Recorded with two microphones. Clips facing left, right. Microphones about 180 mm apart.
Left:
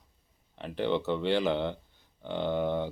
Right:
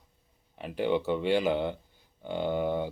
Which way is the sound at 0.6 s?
10° right (ahead or behind).